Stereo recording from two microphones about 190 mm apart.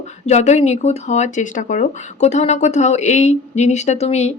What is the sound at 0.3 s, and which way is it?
Speech, 35° left (ahead or behind).